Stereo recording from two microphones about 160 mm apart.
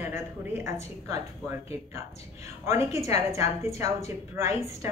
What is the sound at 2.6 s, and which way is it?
A man's voice, 20° right (ahead or behind).